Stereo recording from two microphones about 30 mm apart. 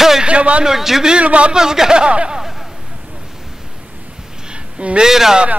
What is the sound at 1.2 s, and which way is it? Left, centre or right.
Speech, right.